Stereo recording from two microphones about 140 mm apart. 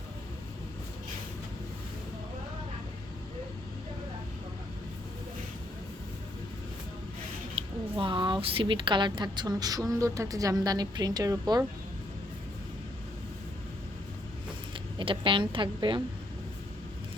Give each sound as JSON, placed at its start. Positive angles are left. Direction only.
{"t": 7.5, "sound": "a woman's voice", "side_deg": -40}
{"t": 14.9, "sound": "a woman's voice", "side_deg": -40}